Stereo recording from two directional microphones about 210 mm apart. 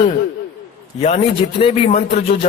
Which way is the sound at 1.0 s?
30° left (ahead or behind).